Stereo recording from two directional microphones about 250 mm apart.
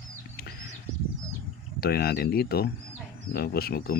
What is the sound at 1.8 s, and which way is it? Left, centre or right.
Speech, left.